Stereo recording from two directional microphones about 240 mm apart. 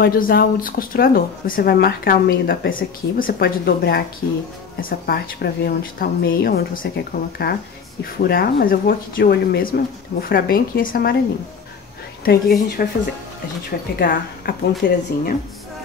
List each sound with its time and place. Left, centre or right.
0.0 s speech: left
12.3 s speech: left